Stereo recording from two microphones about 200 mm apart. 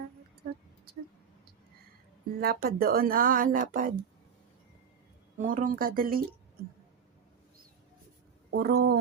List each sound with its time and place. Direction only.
2.4 s speech: 50° right (ahead or behind)
5.4 s speech: 40° right (ahead or behind)
8.5 s speech: 50° right (ahead or behind)